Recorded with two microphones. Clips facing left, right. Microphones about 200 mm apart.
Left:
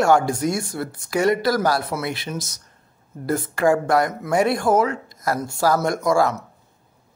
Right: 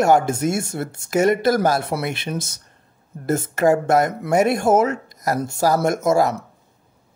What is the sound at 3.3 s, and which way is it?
Speech, 25° right (ahead or behind).